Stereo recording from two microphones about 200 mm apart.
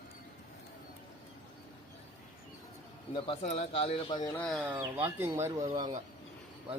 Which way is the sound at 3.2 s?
30° left (ahead or behind).